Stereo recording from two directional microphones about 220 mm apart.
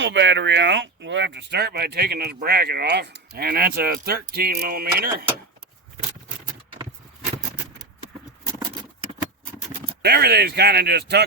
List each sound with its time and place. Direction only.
0.0 s speech: 55° right (ahead or behind)
10.0 s speech: 45° right (ahead or behind)